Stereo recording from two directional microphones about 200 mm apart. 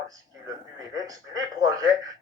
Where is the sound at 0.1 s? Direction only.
20° right (ahead or behind).